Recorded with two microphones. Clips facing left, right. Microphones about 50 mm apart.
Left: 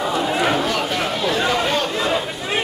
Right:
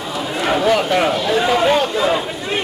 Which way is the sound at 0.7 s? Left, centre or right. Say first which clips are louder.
Right 6 dB; centre.